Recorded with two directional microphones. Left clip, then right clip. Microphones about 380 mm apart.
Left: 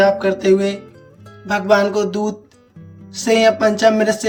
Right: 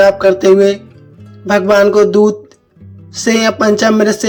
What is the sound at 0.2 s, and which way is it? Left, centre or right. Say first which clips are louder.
A man's voice: right 7 dB; centre.